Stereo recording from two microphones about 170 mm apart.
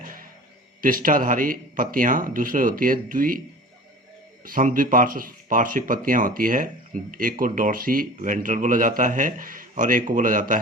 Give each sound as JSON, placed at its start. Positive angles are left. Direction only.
{"t": 0.0, "sound": "a sound", "side_deg": -55}
{"t": 0.8, "sound": "speech", "side_deg": -55}
{"t": 4.4, "sound": "speech", "side_deg": -55}